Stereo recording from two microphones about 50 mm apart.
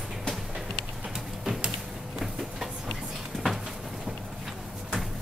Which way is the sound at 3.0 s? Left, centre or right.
Centre.